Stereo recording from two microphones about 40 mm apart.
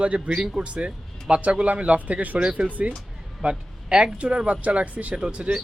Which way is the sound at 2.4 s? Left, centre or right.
Right.